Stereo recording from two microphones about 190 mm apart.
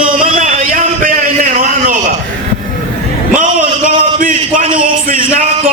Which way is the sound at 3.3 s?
45° right (ahead or behind).